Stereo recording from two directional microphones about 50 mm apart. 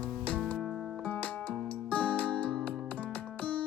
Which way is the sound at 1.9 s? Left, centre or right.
Left.